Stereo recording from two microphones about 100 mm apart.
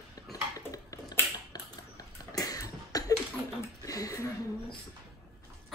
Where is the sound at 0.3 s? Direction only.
35° left (ahead or behind).